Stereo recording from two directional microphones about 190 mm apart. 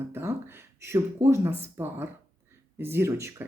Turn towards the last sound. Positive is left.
turn(degrees=-15)  # may be behind; listen again after turning